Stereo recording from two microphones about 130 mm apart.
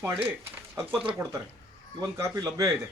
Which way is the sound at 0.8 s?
15° right (ahead or behind).